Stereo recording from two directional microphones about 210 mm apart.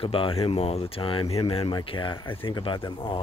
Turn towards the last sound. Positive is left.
turn(degrees=25)  # may be behind; listen again after turning